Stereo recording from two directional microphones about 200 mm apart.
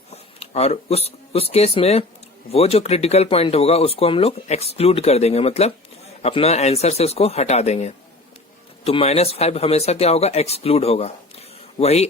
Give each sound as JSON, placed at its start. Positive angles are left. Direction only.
{"t": 0.1, "sound": "speech", "side_deg": 30}